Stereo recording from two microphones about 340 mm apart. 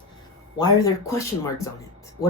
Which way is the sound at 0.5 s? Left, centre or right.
Centre.